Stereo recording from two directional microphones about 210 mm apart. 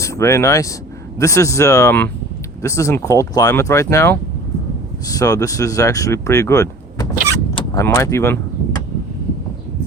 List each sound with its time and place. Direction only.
0.0 s speech: 15° left (ahead or behind)
7.5 s vehicle: 15° left (ahead or behind)